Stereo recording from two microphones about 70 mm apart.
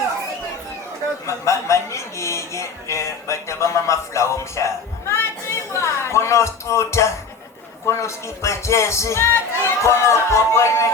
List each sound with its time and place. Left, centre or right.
1.3 s a man's voice: left